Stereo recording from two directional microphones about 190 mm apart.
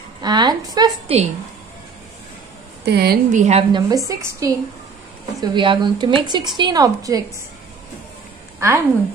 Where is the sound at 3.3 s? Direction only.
40° right (ahead or behind).